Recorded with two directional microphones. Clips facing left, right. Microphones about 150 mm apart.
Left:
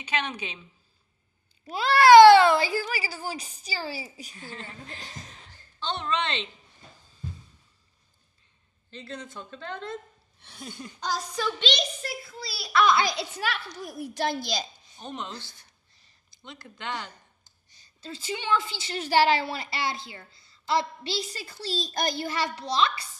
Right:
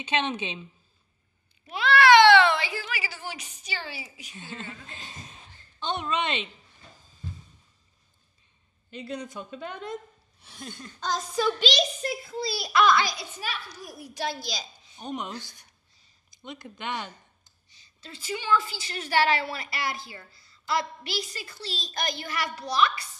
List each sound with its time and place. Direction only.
0.0 s a child's voice: 25° right (ahead or behind)
1.7 s speech: 35° left (ahead or behind)
4.4 s a child's voice: 20° right (ahead or behind)
8.9 s a woman's voice: 15° right (ahead or behind)
10.4 s speech: centre (ahead or behind)
12.0 s a child's voice: 20° right (ahead or behind)
13.0 s a child's voice: 70° left (ahead or behind)
15.0 s a woman's voice: 15° right (ahead or behind)
17.6 s a sound: 45° left (ahead or behind)
18.1 s a woman's voice: 25° left (ahead or behind)